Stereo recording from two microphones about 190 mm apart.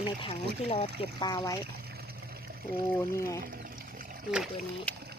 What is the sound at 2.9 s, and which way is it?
Speech, 15° left (ahead or behind).